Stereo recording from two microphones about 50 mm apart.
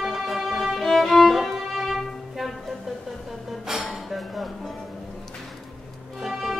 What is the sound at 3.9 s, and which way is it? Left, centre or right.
Dishes, centre.